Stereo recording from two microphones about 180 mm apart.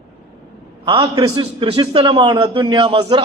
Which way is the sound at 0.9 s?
30° right (ahead or behind).